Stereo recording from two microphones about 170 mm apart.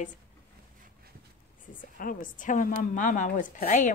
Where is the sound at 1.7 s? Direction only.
50° left (ahead or behind).